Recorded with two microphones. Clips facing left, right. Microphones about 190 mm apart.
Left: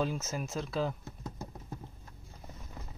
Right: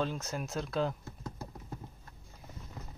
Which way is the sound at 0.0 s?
5° left (ahead or behind).